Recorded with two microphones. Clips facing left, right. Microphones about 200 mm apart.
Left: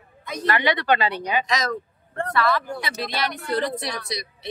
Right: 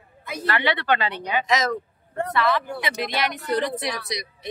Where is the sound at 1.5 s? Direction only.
20° right (ahead or behind).